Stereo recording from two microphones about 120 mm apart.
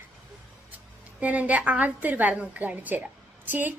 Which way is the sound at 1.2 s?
10° right (ahead or behind).